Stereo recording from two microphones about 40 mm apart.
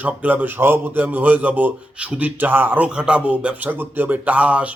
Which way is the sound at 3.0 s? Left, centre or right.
Right.